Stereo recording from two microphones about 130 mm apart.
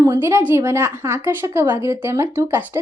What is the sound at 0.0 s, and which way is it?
A woman's voice, 20° right (ahead or behind).